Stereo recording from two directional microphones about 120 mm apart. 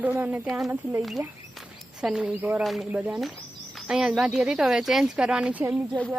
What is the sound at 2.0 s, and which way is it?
Speech, 5° right (ahead or behind).